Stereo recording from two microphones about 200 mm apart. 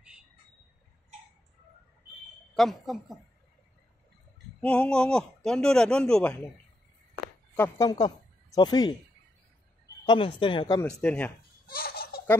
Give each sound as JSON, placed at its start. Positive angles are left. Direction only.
{"t": 2.5, "sound": "speech", "side_deg": 0}
{"t": 4.6, "sound": "speech", "side_deg": 5}
{"t": 7.5, "sound": "a woman's voice", "side_deg": 10}
{"t": 10.0, "sound": "a woman's voice", "side_deg": 25}
{"t": 10.8, "sound": "speech", "side_deg": 10}
{"t": 11.6, "sound": "turkey", "side_deg": 45}